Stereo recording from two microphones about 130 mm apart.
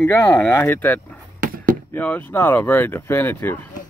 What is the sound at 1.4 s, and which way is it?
Chop, 90° right.